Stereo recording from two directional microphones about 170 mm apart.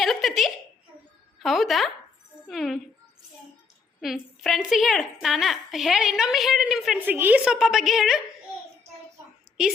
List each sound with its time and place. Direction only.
0.0 s a sound: centre (ahead or behind)
1.4 s a woman's voice: centre (ahead or behind)
4.0 s a woman's voice: centre (ahead or behind)
9.6 s a woman's voice: 5° right (ahead or behind)